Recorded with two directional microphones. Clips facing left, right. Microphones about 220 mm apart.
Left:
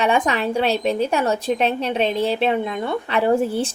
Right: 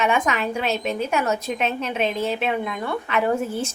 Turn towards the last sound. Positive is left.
turn(degrees=30)  # may be behind; listen again after turning